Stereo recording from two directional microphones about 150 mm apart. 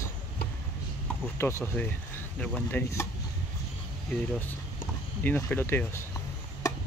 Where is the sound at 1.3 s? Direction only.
15° left (ahead or behind).